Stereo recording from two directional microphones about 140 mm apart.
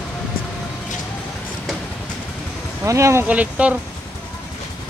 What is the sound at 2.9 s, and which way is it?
Speech, 20° right (ahead or behind).